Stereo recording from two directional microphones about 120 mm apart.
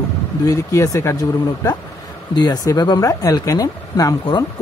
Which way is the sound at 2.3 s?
35° left (ahead or behind).